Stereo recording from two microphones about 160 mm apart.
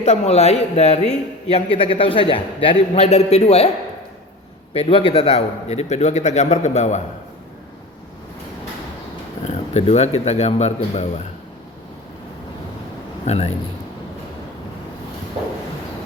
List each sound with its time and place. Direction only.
0.0 s a man's voice: 40° left (ahead or behind)
4.7 s a man's voice: 35° left (ahead or behind)
9.4 s a man's voice: 40° left (ahead or behind)
13.2 s a man's voice: 40° left (ahead or behind)